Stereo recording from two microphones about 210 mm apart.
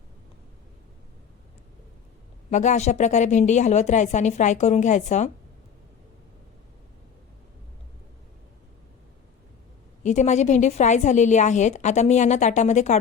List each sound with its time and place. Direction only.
2.5 s a woman's voice: 35° left (ahead or behind)
10.0 s a woman's voice: 35° left (ahead or behind)